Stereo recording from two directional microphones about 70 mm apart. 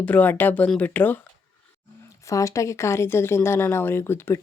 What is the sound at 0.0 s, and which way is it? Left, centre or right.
Speech, left.